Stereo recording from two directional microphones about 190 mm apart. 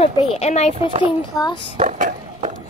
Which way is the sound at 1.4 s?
25° left (ahead or behind).